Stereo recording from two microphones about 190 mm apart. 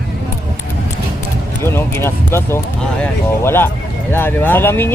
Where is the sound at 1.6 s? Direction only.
10° left (ahead or behind).